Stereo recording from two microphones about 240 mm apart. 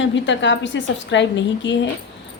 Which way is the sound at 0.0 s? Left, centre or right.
Left.